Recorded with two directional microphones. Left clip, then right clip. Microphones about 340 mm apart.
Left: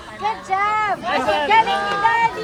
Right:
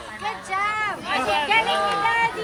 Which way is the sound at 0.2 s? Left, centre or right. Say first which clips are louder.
Left 5 dB; left.